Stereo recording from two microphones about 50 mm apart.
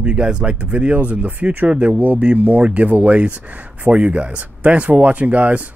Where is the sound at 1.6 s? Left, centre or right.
Right.